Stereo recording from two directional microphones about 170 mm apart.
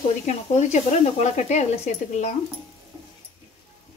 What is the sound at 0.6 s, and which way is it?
Speech, 40° left (ahead or behind).